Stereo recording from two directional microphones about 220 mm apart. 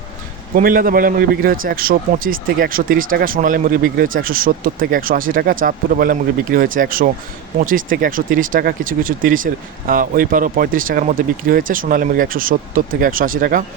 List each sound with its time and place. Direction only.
0.5 s a man's voice: 40° right (ahead or behind)